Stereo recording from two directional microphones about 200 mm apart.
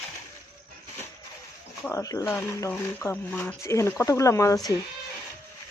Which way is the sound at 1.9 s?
15° left (ahead or behind).